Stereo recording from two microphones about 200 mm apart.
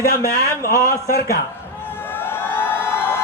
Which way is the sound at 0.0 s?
50° left (ahead or behind).